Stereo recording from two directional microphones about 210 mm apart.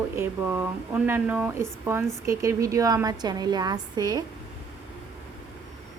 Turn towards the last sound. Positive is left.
turn(degrees=-20)  # may be behind; listen again after turning